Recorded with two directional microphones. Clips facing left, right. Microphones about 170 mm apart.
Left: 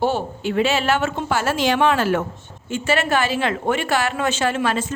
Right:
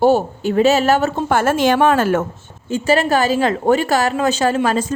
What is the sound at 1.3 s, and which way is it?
A woman's voice, 50° right (ahead or behind).